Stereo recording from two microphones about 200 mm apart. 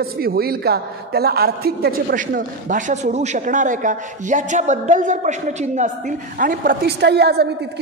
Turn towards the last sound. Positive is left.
turn(degrees=-55)  # may be behind; listen again after turning